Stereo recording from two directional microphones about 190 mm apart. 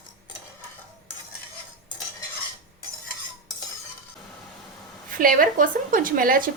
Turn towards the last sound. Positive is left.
turn(degrees=-50)  # may be behind; listen again after turning